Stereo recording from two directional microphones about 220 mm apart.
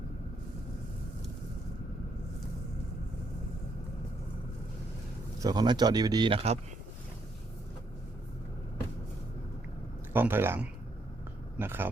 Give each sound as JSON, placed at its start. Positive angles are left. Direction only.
{"t": 5.4, "sound": "speech", "side_deg": -20}
{"t": 10.1, "sound": "speech", "side_deg": -10}